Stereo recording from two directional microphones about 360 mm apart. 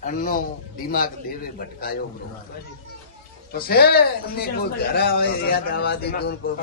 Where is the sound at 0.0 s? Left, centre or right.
Left.